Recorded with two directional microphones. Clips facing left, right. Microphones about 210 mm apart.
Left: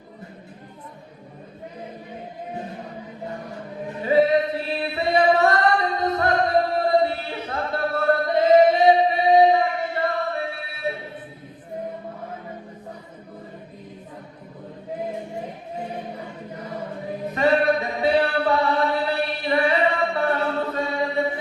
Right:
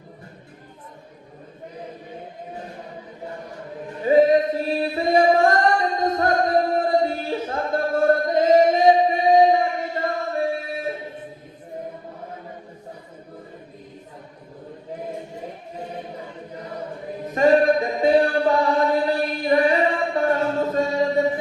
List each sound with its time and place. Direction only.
4.0 s singing: 45° right (ahead or behind)
10.0 s music: 45° right (ahead or behind)
17.3 s singing: 45° right (ahead or behind)